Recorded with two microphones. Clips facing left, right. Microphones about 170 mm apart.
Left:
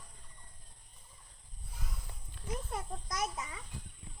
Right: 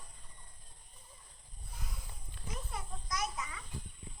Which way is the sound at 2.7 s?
45° left (ahead or behind).